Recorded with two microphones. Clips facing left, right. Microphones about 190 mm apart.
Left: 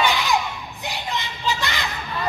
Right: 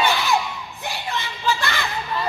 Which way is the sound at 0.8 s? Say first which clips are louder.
Even; 15° left (ahead or behind).